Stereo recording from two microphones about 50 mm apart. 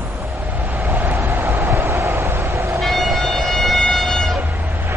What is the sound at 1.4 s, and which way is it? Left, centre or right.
Train, right.